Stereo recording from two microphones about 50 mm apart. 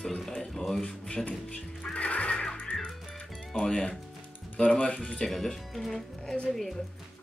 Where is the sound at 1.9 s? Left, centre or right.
Left.